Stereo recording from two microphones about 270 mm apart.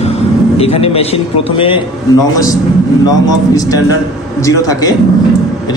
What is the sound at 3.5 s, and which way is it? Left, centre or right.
A man's voice, centre.